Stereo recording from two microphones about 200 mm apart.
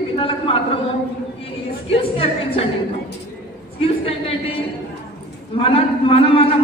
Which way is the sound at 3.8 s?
30° left (ahead or behind).